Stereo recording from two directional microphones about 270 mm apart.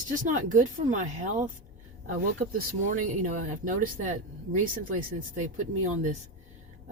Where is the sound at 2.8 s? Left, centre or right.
Right.